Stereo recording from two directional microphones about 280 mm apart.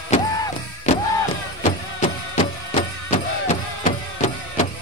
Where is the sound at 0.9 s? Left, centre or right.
Left.